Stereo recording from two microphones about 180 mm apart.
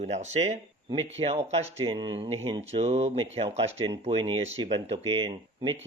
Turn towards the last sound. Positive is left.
turn(degrees=-30)  # may be behind; listen again after turning